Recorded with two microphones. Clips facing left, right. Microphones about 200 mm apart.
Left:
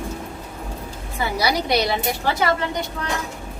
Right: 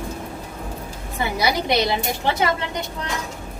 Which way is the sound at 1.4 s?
20° right (ahead or behind).